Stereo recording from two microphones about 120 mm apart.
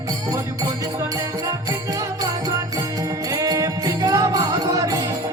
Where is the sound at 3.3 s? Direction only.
30° right (ahead or behind).